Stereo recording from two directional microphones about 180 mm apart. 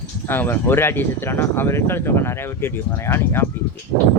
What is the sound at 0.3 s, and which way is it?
Speech, 10° left (ahead or behind).